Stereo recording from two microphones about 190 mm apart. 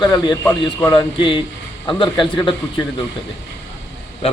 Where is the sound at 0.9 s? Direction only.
25° left (ahead or behind).